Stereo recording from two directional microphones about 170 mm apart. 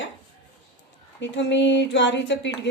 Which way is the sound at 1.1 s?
90° left.